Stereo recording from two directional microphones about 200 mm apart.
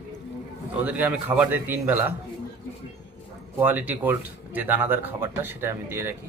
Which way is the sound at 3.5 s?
10° right (ahead or behind).